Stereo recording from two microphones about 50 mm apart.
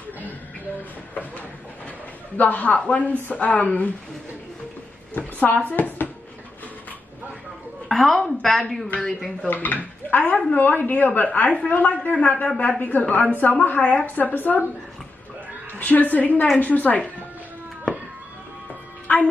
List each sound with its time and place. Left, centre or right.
2.3 s speech: left
5.1 s a woman's voice: left
7.9 s a woman's voice: centre
9.5 s a woman's voice: left
15.8 s speech: left
19.1 s music: left